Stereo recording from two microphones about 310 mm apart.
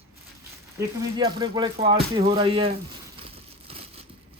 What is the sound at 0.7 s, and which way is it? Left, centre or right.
Speech, centre.